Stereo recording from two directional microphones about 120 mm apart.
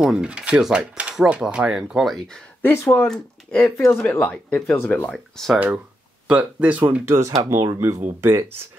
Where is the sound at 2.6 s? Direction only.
15° left (ahead or behind).